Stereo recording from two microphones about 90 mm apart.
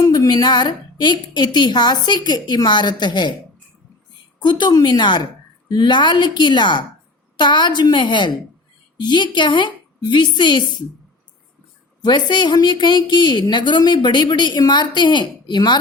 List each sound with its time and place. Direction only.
0.0 s a woman's voice: 45° left (ahead or behind)
4.4 s a woman's voice: 55° left (ahead or behind)
12.0 s a woman's voice: 55° left (ahead or behind)